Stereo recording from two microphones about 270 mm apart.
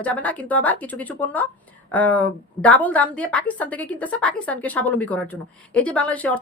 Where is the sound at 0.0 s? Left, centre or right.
Centre.